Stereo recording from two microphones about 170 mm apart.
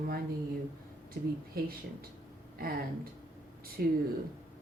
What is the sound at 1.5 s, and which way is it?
Speech, 60° right (ahead or behind).